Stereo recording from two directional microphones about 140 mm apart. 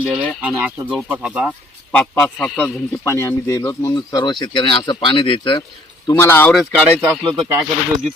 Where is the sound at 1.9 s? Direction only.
10° left (ahead or behind).